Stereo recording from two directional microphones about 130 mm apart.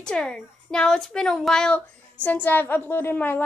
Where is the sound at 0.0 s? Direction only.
5° left (ahead or behind).